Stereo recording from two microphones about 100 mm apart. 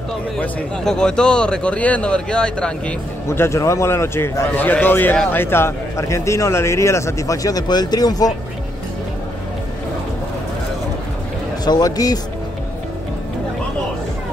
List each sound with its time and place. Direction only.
0.4 s a man's voice: 10° left (ahead or behind)
3.3 s a man's voice: 30° left (ahead or behind)
11.6 s speech: 40° left (ahead or behind)